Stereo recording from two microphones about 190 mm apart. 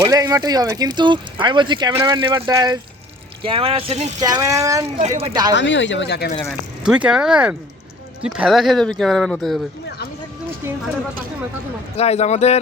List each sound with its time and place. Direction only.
0.0 s speech: 20° right (ahead or behind)
4.2 s speech: 20° right (ahead or behind)
4.9 s speech: 35° right (ahead or behind)
5.5 s speech: 70° left (ahead or behind)
6.5 s speech: 5° right (ahead or behind)
11.9 s speech: 35° left (ahead or behind)